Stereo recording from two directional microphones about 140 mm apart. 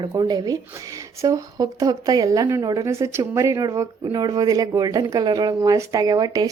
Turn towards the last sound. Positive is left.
turn(degrees=-25)  # may be behind; listen again after turning